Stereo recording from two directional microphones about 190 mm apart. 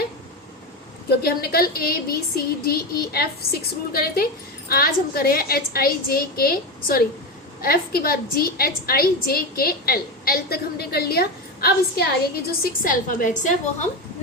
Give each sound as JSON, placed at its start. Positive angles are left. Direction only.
{"t": 1.2, "sound": "a woman's voice", "side_deg": 50}